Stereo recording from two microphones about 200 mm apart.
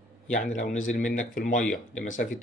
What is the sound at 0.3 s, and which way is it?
Speech, 40° left (ahead or behind).